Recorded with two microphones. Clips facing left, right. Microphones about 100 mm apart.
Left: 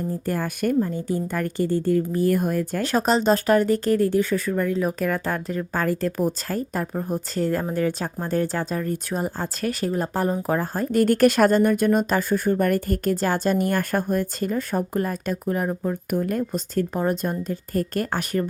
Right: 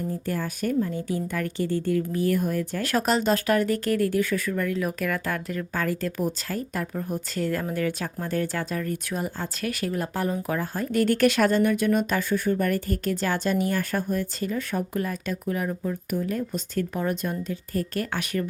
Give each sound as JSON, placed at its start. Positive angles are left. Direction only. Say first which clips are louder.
{"t": 0.3, "sound": "speech", "louder": "left 5 dB", "side_deg": 55}
{"t": 0.9, "sound": "speech", "louder": "left 3 dB", "side_deg": 40}
{"t": 2.8, "sound": "speech", "louder": "left 3 dB", "side_deg": 25}